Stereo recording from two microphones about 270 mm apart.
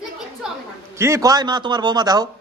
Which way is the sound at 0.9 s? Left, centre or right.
Centre.